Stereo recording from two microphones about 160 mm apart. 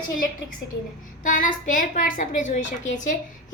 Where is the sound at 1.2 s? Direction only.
55° left (ahead or behind).